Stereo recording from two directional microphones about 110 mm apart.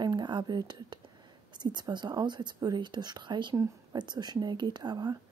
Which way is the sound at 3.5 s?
25° right (ahead or behind).